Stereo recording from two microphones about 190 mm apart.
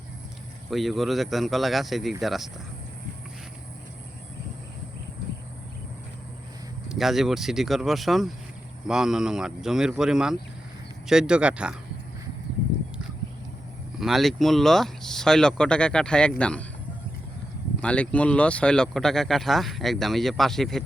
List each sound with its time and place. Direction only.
0.7 s speech: centre (ahead or behind)
6.8 s speech: centre (ahead or behind)
14.0 s speech: centre (ahead or behind)
17.7 s speech: 5° left (ahead or behind)